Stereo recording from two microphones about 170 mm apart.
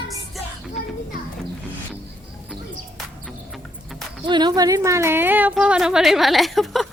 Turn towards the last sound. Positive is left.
turn(degrees=0)  # may be behind; listen again after turning